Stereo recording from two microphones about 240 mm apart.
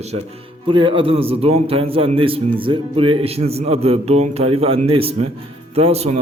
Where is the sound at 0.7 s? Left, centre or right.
Right.